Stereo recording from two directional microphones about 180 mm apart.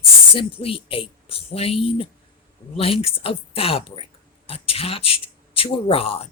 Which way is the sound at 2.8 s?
35° left (ahead or behind).